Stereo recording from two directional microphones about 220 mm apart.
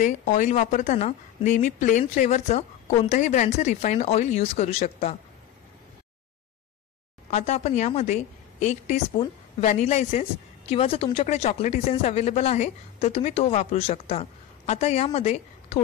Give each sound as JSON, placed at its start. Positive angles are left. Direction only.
{"t": 0.0, "sound": "a woman's voice", "side_deg": 35}
{"t": 7.2, "sound": "a woman's voice", "side_deg": 30}